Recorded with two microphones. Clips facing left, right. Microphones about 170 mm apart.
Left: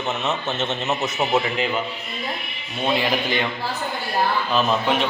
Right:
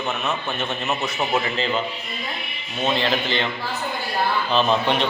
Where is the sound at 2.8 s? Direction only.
10° left (ahead or behind).